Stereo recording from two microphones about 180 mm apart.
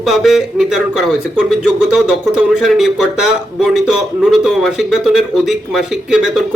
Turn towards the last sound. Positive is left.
turn(degrees=-5)  # may be behind; listen again after turning